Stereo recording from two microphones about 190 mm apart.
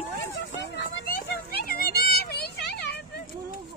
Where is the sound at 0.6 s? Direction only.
55° left (ahead or behind).